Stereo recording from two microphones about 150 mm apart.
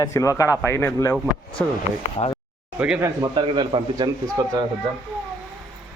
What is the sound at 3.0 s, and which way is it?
Speech, 25° right (ahead or behind).